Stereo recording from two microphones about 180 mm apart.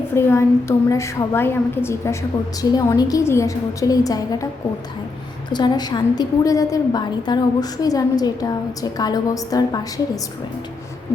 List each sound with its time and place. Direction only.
0.1 s a woman's voice: 15° left (ahead or behind)
5.5 s a woman's voice: 25° left (ahead or behind)